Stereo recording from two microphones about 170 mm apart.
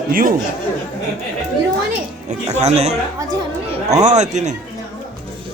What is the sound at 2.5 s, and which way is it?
A man's voice, 40° right (ahead or behind).